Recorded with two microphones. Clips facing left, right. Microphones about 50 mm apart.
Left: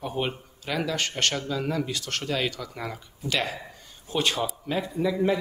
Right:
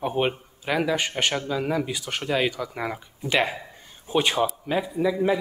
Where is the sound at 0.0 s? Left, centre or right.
Right.